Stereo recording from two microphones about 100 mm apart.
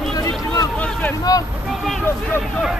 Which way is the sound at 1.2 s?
40° left (ahead or behind).